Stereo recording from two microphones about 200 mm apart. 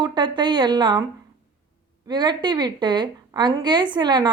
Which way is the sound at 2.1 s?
20° right (ahead or behind).